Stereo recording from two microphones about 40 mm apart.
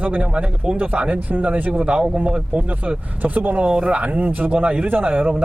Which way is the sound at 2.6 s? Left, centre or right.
Right.